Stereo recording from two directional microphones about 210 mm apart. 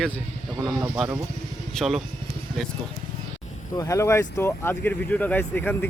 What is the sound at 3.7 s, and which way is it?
Speech, 15° left (ahead or behind).